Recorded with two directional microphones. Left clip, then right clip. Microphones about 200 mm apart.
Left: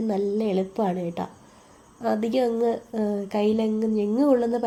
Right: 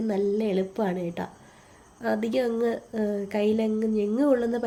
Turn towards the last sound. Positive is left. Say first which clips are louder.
# left 2 dB
turn(degrees=5)  # may be behind; listen again after turning